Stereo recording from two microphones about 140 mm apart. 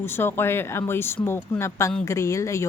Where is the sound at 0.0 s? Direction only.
15° left (ahead or behind).